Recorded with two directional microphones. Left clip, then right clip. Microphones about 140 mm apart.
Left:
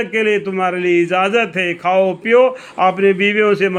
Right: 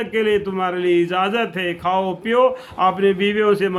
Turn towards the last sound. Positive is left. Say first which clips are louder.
# left 3 dB
turn(degrees=30)  # may be behind; listen again after turning